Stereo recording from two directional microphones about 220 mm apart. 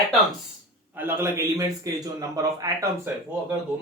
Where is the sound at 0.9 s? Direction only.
10° right (ahead or behind).